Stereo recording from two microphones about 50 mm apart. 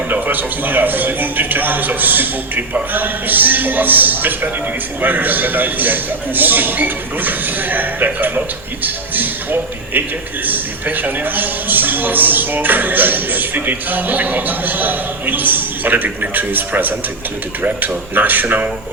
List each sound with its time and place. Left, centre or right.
0.1 s a man's voice: right